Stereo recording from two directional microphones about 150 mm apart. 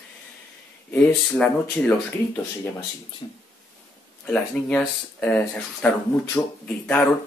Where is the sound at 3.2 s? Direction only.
30° left (ahead or behind).